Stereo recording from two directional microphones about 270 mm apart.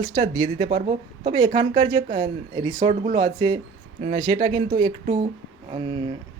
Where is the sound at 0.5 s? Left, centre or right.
Right.